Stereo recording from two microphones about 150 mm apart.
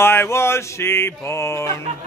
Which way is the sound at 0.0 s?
15° left (ahead or behind).